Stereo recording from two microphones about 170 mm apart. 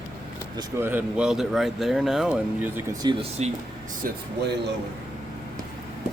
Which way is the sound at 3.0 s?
25° right (ahead or behind).